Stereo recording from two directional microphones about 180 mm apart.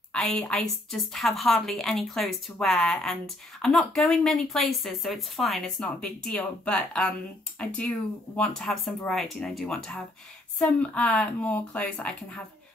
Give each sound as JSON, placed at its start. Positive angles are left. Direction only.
{"t": 0.1, "sound": "a woman's voice", "side_deg": 5}